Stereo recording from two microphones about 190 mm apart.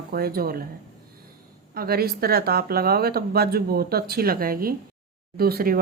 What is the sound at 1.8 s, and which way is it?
Speech, 55° right (ahead or behind).